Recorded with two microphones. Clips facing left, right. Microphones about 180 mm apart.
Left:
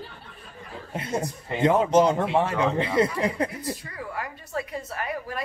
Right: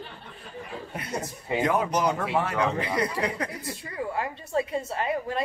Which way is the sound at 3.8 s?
25° right (ahead or behind).